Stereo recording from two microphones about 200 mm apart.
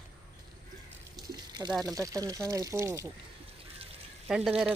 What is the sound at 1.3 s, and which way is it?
Water, 20° right (ahead or behind).